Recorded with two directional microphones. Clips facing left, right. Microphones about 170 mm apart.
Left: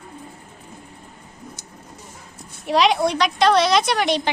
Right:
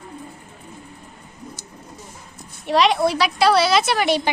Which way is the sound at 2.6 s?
Centre (ahead or behind).